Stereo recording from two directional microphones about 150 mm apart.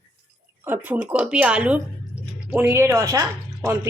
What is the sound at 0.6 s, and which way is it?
A woman's voice, 10° right (ahead or behind).